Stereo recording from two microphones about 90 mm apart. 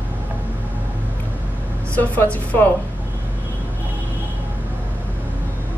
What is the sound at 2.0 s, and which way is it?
Speech, 20° left (ahead or behind).